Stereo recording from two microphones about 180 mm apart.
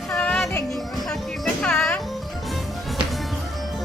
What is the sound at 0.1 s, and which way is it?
Music, 5° left (ahead or behind).